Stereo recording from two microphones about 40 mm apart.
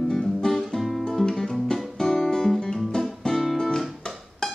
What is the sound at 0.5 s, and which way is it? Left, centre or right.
Music, centre.